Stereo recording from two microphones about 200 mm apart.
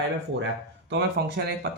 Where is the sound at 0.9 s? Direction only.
55° right (ahead or behind).